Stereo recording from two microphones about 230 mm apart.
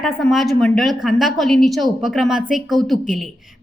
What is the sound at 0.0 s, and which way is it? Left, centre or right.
A woman's voice, centre.